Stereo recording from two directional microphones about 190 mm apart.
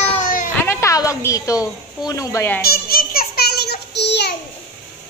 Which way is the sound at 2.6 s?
50° left (ahead or behind).